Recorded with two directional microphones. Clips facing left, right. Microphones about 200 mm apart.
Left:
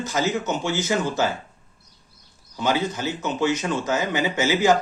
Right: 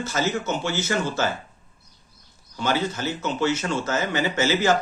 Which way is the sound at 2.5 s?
15° left (ahead or behind).